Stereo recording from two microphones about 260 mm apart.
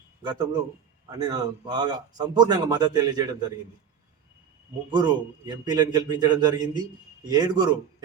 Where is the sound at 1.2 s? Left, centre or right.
Centre.